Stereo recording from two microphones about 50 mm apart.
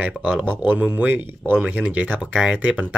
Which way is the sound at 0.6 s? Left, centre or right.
Right.